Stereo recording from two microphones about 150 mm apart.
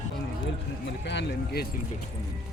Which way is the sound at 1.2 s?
90° left.